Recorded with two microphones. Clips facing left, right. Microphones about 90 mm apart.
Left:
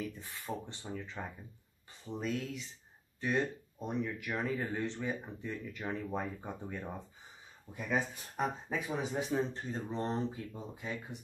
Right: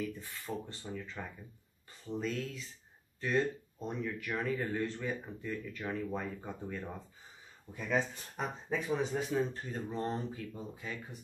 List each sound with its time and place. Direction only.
0.2 s speech: 20° left (ahead or behind)
9.1 s speech: 20° left (ahead or behind)